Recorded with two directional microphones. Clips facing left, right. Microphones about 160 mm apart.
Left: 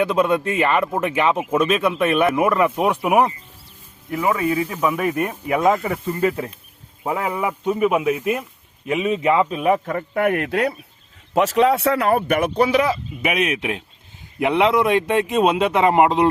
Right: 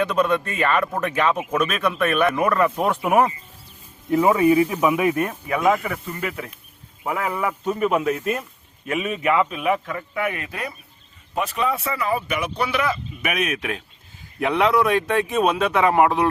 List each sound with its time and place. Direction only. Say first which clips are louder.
0.2 s a man's voice: left 1 dB; 10° left (ahead or behind)
0.5 s a man's voice: left 2 dB; 20° left (ahead or behind)
2.8 s a man's voice: left 2 dB; 5° left (ahead or behind)
4.1 s a man's voice: right 4 dB; 25° right (ahead or behind)
4.4 s speech: right 4 dB; 15° right (ahead or behind)
5.5 s a man's voice: left 3 dB; 25° left (ahead or behind)
7.1 s a man's voice: left 2 dB; 20° left (ahead or behind); by 10.8 s 70° left (ahead or behind)
11.3 s a man's voice: left 7 dB; 85° left; by 13.5 s 30° left (ahead or behind)
13.6 s a man's voice: left 3 dB; 20° left (ahead or behind)